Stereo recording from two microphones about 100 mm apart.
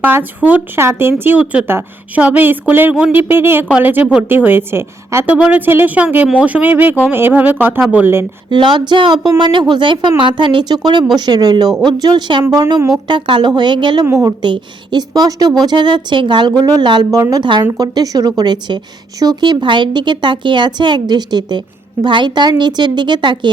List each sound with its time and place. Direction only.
0.0 s a woman's voice: 20° right (ahead or behind)
5.3 s a woman's voice: 15° right (ahead or behind)
8.4 s speech: 50° right (ahead or behind)
13.1 s speech: 55° right (ahead or behind)
14.1 s a woman's voice: 35° right (ahead or behind)
14.4 s a woman's voice: 50° right (ahead or behind)